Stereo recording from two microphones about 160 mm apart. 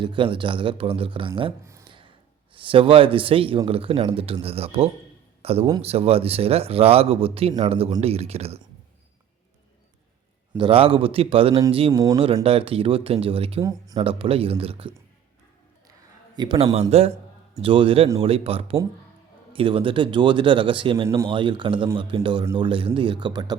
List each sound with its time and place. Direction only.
0.0 s a man's voice: 30° right (ahead or behind)
2.6 s a man's voice: 35° right (ahead or behind)
10.6 s a man's voice: 35° right (ahead or behind)
13.7 s speech: 20° right (ahead or behind)
14.0 s a man's voice: 35° right (ahead or behind)
16.3 s a man's voice: 30° right (ahead or behind)